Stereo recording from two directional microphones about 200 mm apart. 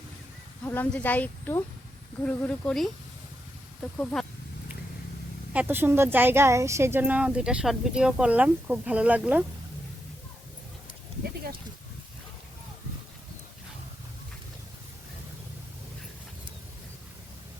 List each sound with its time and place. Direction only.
0.6 s speech: 10° left (ahead or behind)
3.9 s speech: 5° left (ahead or behind)
5.5 s speech: 10° right (ahead or behind)